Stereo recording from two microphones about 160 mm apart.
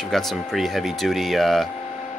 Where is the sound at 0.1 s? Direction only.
Centre (ahead or behind).